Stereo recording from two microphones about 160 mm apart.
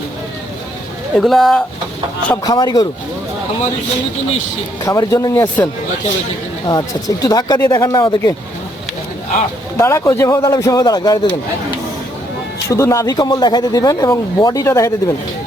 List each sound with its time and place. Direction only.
1.1 s speech: centre (ahead or behind)
2.4 s speech: 25° left (ahead or behind)
4.9 s speech: 20° left (ahead or behind)
6.7 s speech: 25° left (ahead or behind)
9.7 s speech: 15° left (ahead or behind)
12.6 s speech: 20° left (ahead or behind)